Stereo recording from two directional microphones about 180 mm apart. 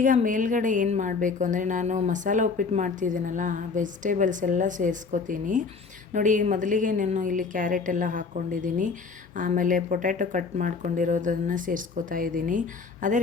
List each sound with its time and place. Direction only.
0.0 s a woman's voice: 45° right (ahead or behind)